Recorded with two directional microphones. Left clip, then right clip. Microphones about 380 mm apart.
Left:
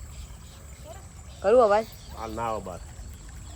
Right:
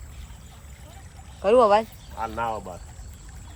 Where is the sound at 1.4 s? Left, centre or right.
Right.